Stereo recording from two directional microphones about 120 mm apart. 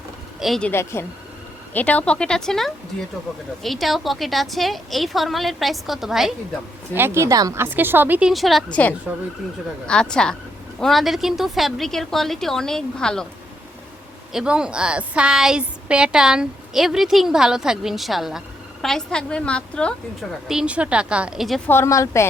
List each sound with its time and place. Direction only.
0.3 s speech: centre (ahead or behind)
0.6 s a woman's voice: 20° left (ahead or behind); by 6.3 s centre (ahead or behind)
6.9 s speech: 20° right (ahead or behind)
8.3 s a woman's voice: centre (ahead or behind)
8.7 s a woman's voice: 10° left (ahead or behind)
14.3 s a woman's voice: 5° right (ahead or behind); by 19.9 s 10° left (ahead or behind)
20.5 s speech: 5° right (ahead or behind)
21.7 s a woman's voice: 25° left (ahead or behind)